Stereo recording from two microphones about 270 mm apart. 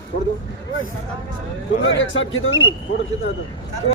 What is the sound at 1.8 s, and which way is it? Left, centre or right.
Speech, left.